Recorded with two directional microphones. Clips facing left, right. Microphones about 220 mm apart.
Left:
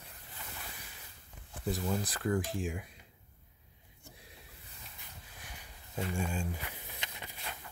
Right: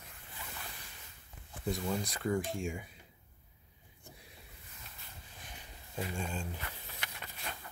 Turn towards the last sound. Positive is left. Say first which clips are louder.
# left 1 dB
turn(degrees=20)  # may be behind; listen again after turning